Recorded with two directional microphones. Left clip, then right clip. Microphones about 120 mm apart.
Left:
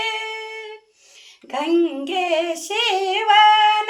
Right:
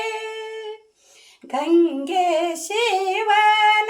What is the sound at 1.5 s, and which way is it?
Female singing, 40° right (ahead or behind).